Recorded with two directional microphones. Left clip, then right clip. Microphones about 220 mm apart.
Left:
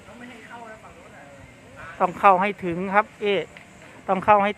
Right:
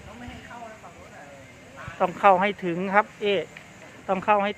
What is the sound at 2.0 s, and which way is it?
Speech, 15° left (ahead or behind).